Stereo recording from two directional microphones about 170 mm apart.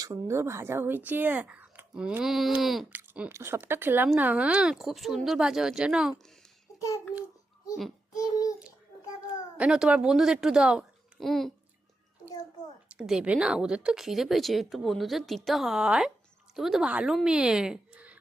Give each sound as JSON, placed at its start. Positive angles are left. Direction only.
{"t": 0.0, "sound": "speech", "side_deg": -20}
{"t": 3.0, "sound": "speech", "side_deg": -15}
{"t": 6.7, "sound": "a sound", "side_deg": 20}
{"t": 8.1, "sound": "a child's voice", "side_deg": 20}
{"t": 9.6, "sound": "speech", "side_deg": -5}
{"t": 12.9, "sound": "a woman's voice", "side_deg": -5}